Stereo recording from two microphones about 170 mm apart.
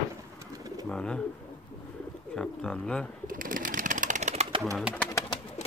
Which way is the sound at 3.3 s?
55° right (ahead or behind).